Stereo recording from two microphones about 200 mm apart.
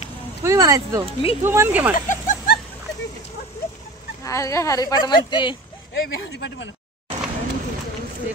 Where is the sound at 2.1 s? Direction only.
40° left (ahead or behind).